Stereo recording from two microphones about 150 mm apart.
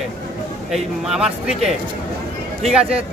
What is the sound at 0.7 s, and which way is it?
A man's voice, centre (ahead or behind).